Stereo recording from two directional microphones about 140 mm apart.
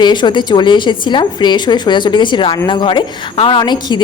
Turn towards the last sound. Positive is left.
turn(degrees=30)  # may be behind; listen again after turning